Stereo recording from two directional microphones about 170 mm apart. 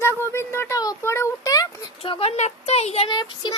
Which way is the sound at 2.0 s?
35° left (ahead or behind).